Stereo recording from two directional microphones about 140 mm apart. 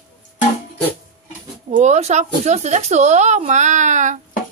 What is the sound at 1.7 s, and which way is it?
Speech, 55° right (ahead or behind).